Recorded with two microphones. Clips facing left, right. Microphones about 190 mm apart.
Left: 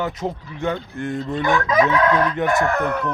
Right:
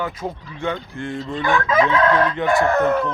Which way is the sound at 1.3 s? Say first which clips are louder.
Even; 20° left (ahead or behind).